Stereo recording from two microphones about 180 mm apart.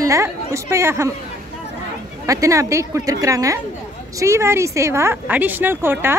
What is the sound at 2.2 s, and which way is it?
A woman's voice, 20° right (ahead or behind).